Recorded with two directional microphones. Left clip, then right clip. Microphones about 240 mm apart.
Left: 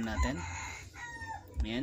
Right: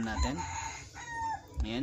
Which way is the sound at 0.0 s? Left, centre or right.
Centre.